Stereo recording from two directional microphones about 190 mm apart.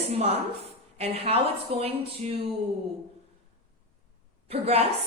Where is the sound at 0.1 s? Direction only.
30° right (ahead or behind).